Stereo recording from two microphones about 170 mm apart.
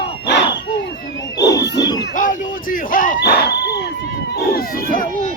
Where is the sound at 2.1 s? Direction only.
50° left (ahead or behind); by 3.7 s 75° left (ahead or behind).